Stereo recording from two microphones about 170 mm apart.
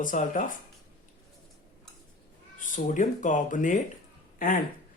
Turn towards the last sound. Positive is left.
turn(degrees=55)  # may be behind; listen again after turning